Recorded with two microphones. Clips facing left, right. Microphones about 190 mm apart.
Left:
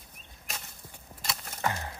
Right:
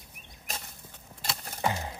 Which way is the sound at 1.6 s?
15° right (ahead or behind).